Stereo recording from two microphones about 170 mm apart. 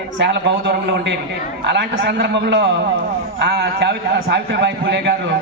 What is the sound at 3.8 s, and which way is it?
A man's voice, 80° right.